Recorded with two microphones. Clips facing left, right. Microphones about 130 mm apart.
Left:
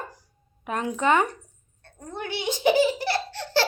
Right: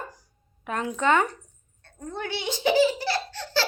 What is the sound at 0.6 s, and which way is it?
A woman's voice, 20° left (ahead or behind).